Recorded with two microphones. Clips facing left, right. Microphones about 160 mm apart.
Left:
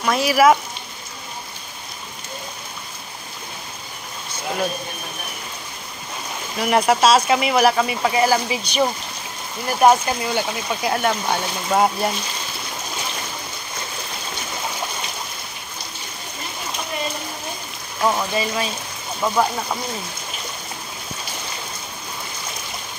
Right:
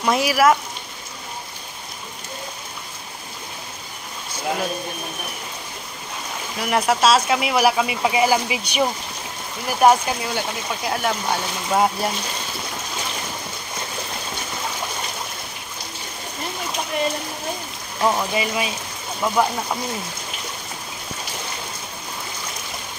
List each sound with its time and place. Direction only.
0.0 s speech: 20° right (ahead or behind)
0.3 s speech: centre (ahead or behind)
6.6 s speech: centre (ahead or behind)
18.0 s speech: 15° right (ahead or behind)
19.2 s speech: centre (ahead or behind)